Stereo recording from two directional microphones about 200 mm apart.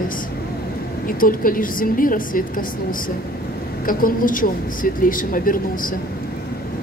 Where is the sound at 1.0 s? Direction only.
45° left (ahead or behind).